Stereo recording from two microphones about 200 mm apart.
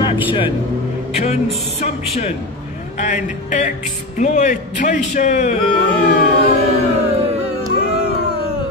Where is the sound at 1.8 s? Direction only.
35° left (ahead or behind).